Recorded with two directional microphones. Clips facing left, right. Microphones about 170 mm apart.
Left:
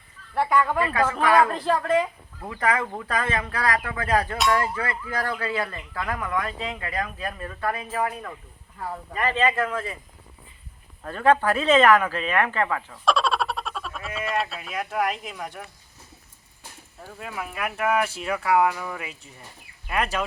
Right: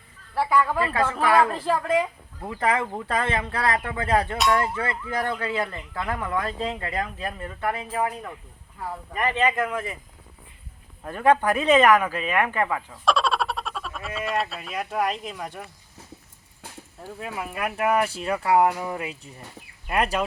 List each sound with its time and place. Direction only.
0.3 s speech: 5° right (ahead or behind)
1.2 s speech: 25° right (ahead or behind)
1.5 s speech: 5° right (ahead or behind)
2.6 s speech: 25° right (ahead or behind)
11.0 s speech: 15° right (ahead or behind)
12.9 s speech: centre (ahead or behind)
17.2 s speech: centre (ahead or behind)
17.9 s speech: 35° right (ahead or behind)
19.9 s speech: 35° right (ahead or behind)